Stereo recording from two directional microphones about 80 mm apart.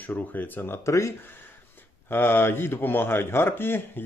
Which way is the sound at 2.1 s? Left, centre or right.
Left.